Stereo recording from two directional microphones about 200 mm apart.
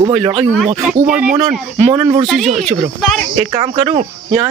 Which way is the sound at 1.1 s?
10° right (ahead or behind).